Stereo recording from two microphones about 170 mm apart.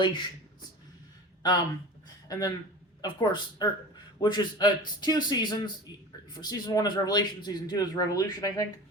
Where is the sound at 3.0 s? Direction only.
25° left (ahead or behind).